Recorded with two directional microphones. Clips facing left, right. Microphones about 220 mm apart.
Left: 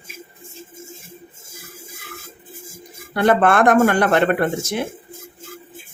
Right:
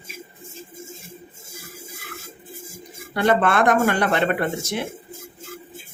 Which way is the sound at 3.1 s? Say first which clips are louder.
Left 3 dB; 50° left (ahead or behind).